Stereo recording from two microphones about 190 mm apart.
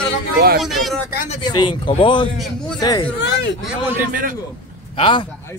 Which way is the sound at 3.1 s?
65° left (ahead or behind).